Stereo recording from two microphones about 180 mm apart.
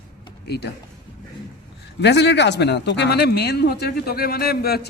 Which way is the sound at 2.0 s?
70° left (ahead or behind).